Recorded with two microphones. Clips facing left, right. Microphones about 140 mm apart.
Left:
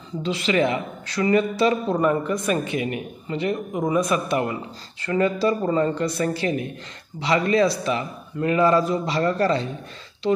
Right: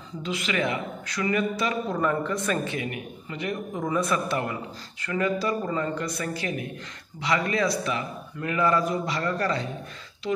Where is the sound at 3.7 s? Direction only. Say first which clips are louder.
Left 3 dB; 15° left (ahead or behind).